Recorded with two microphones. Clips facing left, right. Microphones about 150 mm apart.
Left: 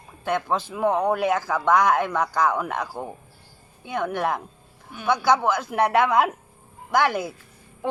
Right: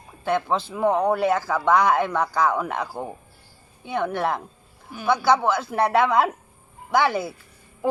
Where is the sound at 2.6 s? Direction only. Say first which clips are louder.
Right 1 dB; 5° right (ahead or behind).